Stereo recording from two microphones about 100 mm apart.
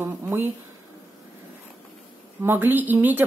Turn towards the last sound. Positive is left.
turn(degrees=-20)  # may be behind; listen again after turning